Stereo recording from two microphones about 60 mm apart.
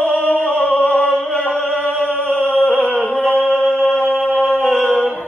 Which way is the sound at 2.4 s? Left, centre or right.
Left.